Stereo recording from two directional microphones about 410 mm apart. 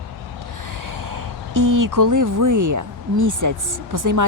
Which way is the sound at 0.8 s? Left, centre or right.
Right.